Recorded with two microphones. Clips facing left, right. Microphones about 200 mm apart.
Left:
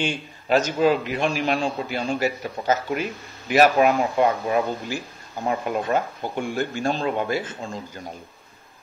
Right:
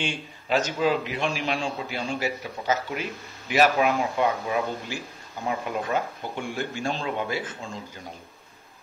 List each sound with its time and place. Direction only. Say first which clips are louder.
0.0 s a man's voice: left 4 dB; 45° left (ahead or behind)